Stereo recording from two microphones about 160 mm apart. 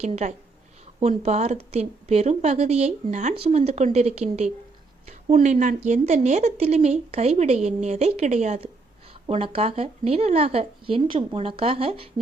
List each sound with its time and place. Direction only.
0.0 s a woman's voice: 45° right (ahead or behind)
3.3 s a woman's voice: 35° right (ahead or behind)